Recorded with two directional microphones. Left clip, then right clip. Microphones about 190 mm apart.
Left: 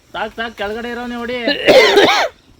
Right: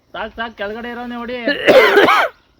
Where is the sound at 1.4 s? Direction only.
15° right (ahead or behind).